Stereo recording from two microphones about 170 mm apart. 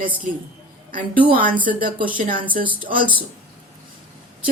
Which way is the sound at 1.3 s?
55° right (ahead or behind).